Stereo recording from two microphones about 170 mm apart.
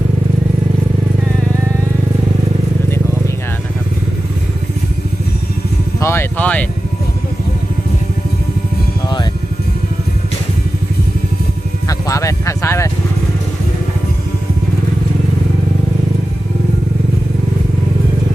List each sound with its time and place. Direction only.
6.0 s speech: 15° left (ahead or behind)
11.9 s music: 20° left (ahead or behind)